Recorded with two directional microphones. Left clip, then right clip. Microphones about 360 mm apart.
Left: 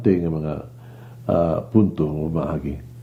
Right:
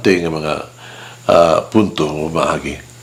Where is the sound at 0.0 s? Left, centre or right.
Centre.